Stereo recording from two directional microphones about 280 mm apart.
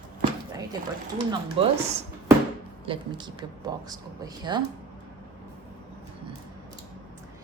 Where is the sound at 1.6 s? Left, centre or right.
Centre.